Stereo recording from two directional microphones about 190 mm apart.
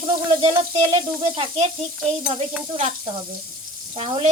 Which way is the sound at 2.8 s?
30° right (ahead or behind).